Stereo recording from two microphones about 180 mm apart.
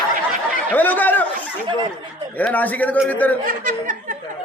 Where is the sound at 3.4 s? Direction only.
45° right (ahead or behind).